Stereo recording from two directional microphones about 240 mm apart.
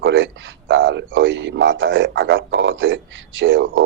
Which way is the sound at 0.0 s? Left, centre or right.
Right.